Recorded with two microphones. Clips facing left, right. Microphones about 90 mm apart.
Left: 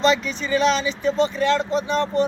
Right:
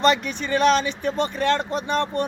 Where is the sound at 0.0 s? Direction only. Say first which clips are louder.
Even; 55° right (ahead or behind).